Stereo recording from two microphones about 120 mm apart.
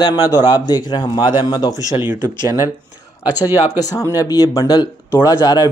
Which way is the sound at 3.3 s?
15° right (ahead or behind).